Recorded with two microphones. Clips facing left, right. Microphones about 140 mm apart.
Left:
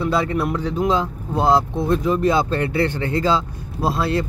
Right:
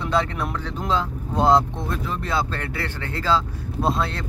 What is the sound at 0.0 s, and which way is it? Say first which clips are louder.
Speech: left 4 dB; 5° left (ahead or behind).